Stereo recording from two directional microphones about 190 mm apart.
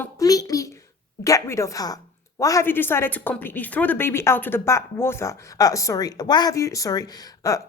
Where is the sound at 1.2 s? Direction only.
15° left (ahead or behind).